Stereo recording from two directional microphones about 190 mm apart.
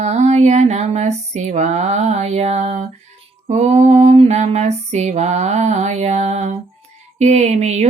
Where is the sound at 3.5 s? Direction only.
35° right (ahead or behind).